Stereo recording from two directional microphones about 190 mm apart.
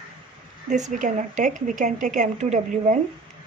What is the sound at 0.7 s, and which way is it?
A woman's voice, 40° right (ahead or behind).